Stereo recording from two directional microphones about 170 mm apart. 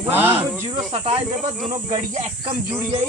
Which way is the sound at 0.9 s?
35° right (ahead or behind).